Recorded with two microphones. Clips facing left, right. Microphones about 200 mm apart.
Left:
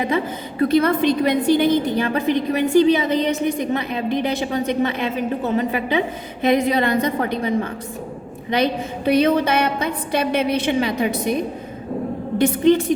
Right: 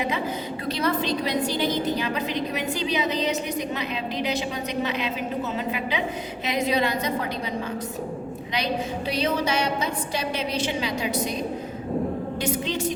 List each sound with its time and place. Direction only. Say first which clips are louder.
0.6 s a woman's voice: left 10 dB; 55° left (ahead or behind)
6.4 s a woman's voice: left 7 dB; 55° left (ahead or behind)